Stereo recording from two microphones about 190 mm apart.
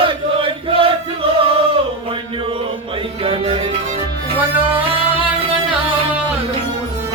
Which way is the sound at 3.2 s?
30° right (ahead or behind).